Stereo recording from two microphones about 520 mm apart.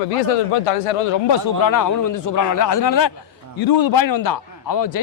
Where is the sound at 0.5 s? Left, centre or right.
Left.